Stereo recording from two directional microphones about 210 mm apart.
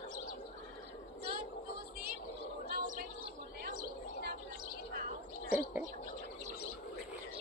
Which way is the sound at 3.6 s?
50° right (ahead or behind).